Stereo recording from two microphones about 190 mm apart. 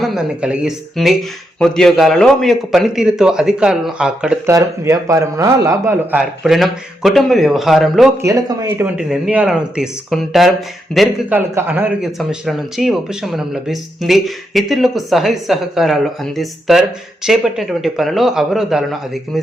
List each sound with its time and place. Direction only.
0.0 s a man's voice: centre (ahead or behind)
4.5 s a man's voice: 15° right (ahead or behind)
8.2 s speech: 20° right (ahead or behind)
9.0 s a man's voice: 5° right (ahead or behind)